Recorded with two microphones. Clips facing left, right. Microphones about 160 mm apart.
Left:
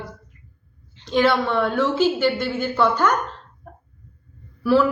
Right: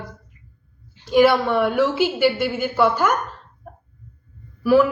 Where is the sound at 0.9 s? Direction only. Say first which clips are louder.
Right 4 dB; 10° right (ahead or behind).